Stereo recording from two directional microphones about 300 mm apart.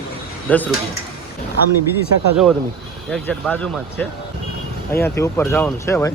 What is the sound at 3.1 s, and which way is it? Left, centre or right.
Speech, centre.